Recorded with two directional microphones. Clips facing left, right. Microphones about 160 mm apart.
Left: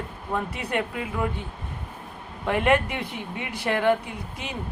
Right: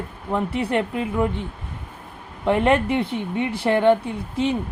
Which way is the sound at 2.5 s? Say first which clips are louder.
Right 4 dB; 25° right (ahead or behind).